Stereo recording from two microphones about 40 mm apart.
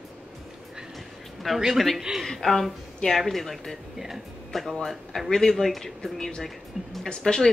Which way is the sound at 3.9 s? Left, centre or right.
Centre.